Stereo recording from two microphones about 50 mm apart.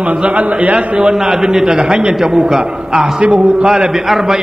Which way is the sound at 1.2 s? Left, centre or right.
Centre.